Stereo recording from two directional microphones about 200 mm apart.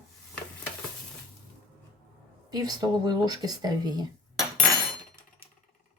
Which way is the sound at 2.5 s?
20° right (ahead or behind).